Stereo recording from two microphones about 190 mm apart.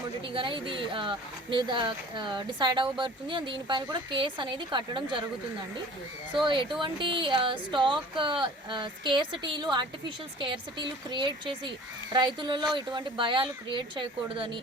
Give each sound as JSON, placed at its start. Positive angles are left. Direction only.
{"t": 0.3, "sound": "speech", "side_deg": -25}
{"t": 6.3, "sound": "speech", "side_deg": -25}